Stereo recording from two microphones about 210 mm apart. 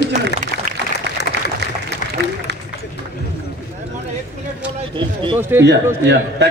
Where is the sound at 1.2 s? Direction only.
50° left (ahead or behind).